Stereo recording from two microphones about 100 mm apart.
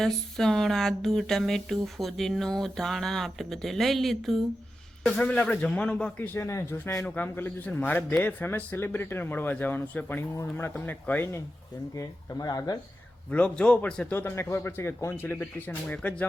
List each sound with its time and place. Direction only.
0.0 s a man's voice: 5° left (ahead or behind)
6.4 s a man's voice: 30° left (ahead or behind)
11.9 s speech: 35° left (ahead or behind)
13.3 s a man's voice: 10° left (ahead or behind)